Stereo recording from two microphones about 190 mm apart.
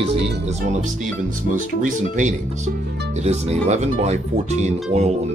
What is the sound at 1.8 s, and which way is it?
Speech, 45° right (ahead or behind).